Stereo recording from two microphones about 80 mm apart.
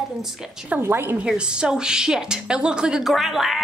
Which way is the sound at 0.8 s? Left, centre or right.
Right.